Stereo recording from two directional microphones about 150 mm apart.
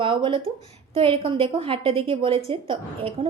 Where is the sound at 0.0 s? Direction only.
35° right (ahead or behind).